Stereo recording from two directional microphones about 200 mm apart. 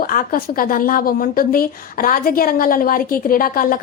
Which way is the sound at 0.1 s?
45° left (ahead or behind).